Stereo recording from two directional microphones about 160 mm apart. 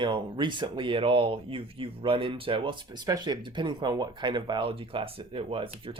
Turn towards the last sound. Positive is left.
turn(degrees=-35)  # may be behind; listen again after turning